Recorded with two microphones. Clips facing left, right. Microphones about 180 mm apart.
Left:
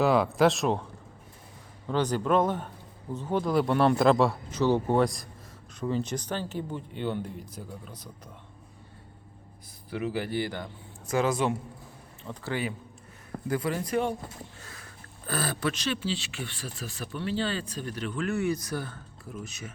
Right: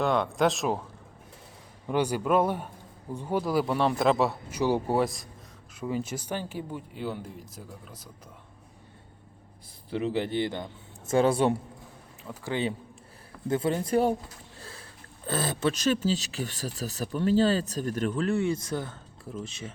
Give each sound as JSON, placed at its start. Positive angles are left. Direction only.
{"t": 0.0, "sound": "speech", "side_deg": 5}
{"t": 1.9, "sound": "speech", "side_deg": -10}
{"t": 9.9, "sound": "a man's voice", "side_deg": -25}
{"t": 14.6, "sound": "a sound", "side_deg": -30}
{"t": 15.3, "sound": "a man's voice", "side_deg": -25}
{"t": 15.7, "sound": "speech", "side_deg": -40}